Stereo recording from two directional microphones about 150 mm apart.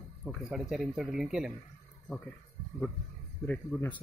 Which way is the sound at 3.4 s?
10° left (ahead or behind).